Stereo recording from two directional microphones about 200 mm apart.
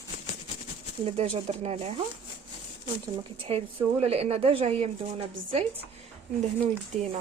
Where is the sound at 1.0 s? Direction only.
30° right (ahead or behind).